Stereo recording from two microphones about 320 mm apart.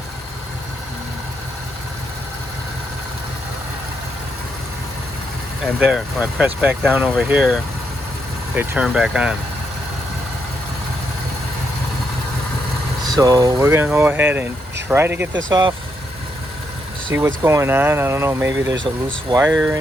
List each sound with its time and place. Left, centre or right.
5.8 s speech: centre
13.1 s speech: centre
17.1 s speech: centre
18.5 s speech: right
19.0 s speech: centre